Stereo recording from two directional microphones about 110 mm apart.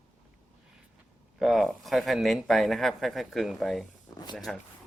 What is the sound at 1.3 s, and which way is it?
Speech, centre (ahead or behind).